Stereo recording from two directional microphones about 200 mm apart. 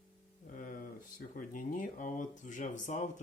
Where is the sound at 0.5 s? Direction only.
45° left (ahead or behind).